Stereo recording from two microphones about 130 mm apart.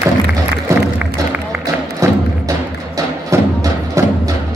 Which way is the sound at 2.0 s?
25° right (ahead or behind).